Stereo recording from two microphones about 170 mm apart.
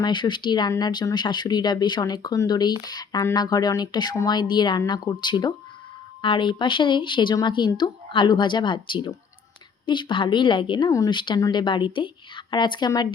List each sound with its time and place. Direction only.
0.0 s speech: 25° left (ahead or behind)